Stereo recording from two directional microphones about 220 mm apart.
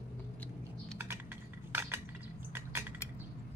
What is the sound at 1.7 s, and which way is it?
Cutlery, 10° right (ahead or behind).